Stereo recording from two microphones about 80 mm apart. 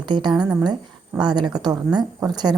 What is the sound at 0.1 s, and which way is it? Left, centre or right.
A woman's voice, right.